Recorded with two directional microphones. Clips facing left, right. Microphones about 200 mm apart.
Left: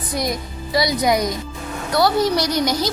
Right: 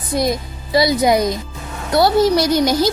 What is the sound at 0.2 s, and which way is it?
A woman's voice, 25° right (ahead or behind).